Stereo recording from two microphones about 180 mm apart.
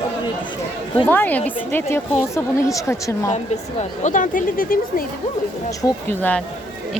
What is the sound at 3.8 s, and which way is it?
Speech, 45° left (ahead or behind).